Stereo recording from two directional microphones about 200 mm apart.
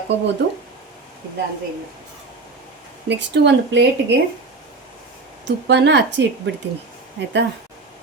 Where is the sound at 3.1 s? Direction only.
60° right (ahead or behind).